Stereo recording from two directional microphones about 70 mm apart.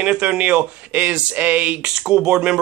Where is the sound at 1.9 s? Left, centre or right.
Centre.